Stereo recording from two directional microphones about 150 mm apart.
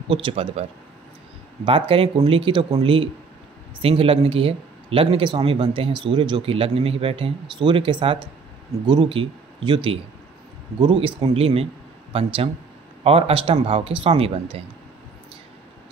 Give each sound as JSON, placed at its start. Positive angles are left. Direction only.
{"t": 0.1, "sound": "speech", "side_deg": -35}